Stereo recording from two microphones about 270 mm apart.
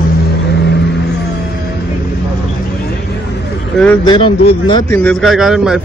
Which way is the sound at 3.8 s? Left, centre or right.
Centre.